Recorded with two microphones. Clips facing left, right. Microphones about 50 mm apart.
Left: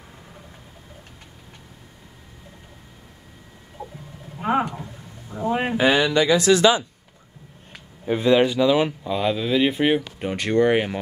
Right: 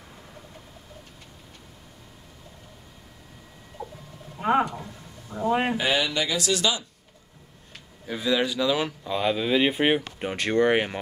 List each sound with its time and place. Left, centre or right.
3.8 s gargling: centre
4.4 s a sound: centre
5.9 s speech: left
6.3 s speech: left
8.1 s speech: left
9.0 s speech: centre